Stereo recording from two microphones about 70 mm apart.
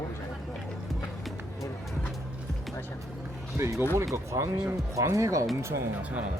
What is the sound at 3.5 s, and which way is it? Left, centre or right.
Speech, right.